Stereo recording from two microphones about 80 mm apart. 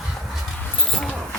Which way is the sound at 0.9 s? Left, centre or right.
Centre.